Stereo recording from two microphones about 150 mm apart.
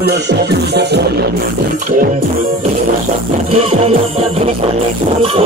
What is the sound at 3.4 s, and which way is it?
Music, 45° right (ahead or behind).